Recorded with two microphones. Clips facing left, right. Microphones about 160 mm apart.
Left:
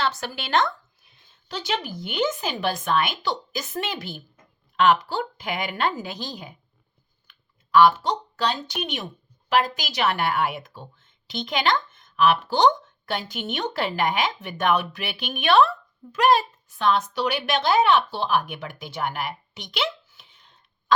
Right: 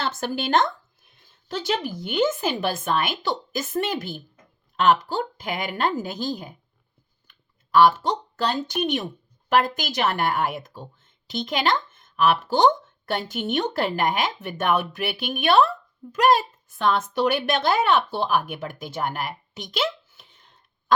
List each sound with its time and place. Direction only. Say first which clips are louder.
0.0 s speech: right 1 dB; 50° right (ahead or behind)